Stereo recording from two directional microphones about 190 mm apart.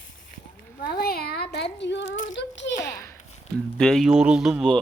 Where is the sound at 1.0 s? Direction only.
55° left (ahead or behind); by 2.7 s 70° left (ahead or behind).